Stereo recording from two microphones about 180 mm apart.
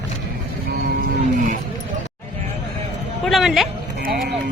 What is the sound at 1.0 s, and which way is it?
Music, 45° right (ahead or behind).